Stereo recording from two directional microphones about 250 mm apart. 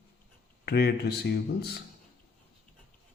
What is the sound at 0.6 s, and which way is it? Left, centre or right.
Speech, left.